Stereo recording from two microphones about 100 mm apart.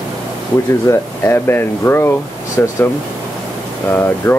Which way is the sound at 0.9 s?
25° left (ahead or behind).